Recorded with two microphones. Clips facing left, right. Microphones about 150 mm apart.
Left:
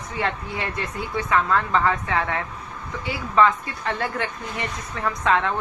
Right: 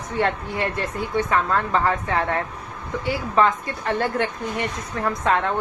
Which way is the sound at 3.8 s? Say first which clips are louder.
Right 4 dB; 55° right (ahead or behind).